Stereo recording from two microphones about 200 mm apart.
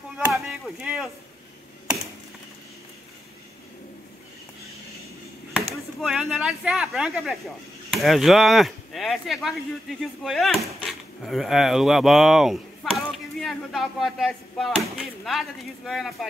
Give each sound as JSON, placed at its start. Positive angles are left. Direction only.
{"t": 0.2, "sound": "chop", "side_deg": -5}
{"t": 5.9, "sound": "speech", "side_deg": 0}